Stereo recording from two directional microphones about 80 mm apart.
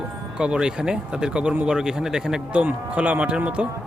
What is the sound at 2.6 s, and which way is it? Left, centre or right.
Speech, centre.